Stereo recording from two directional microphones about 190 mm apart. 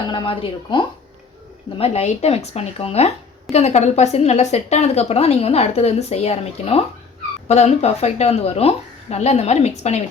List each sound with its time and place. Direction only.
0.1 s a woman's voice: 25° left (ahead or behind)